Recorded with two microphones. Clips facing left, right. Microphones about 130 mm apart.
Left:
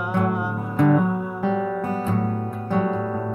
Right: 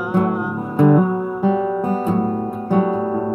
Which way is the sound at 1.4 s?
15° right (ahead or behind).